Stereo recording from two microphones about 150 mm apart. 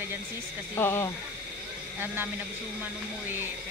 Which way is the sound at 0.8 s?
15° left (ahead or behind).